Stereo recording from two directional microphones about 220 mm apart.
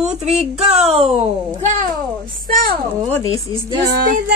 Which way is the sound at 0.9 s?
25° right (ahead or behind).